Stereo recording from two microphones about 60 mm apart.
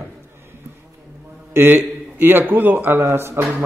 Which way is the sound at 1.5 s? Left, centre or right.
Right.